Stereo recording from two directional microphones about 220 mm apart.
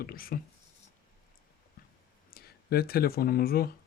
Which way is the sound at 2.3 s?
45° left (ahead or behind).